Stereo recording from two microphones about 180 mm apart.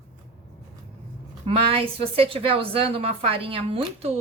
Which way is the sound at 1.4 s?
30° right (ahead or behind).